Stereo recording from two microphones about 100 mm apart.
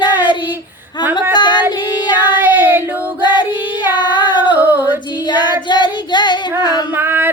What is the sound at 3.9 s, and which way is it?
Child singing, 50° left (ahead or behind).